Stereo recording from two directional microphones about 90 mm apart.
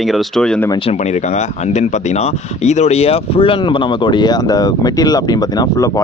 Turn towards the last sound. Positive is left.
turn(degrees=45)  # may be behind; listen again after turning